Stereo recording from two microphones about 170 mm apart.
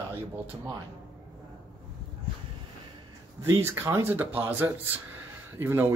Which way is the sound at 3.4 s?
15° right (ahead or behind).